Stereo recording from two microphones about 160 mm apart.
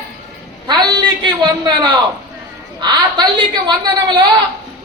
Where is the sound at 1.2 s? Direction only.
30° right (ahead or behind).